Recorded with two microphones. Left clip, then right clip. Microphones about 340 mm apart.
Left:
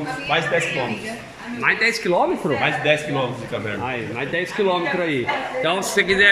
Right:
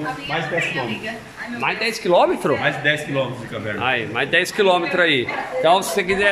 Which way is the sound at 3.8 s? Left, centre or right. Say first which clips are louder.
Right 5 dB; right.